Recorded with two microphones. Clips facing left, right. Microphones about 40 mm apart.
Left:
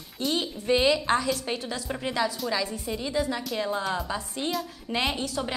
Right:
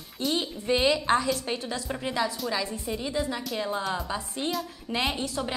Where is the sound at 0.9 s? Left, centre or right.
Centre.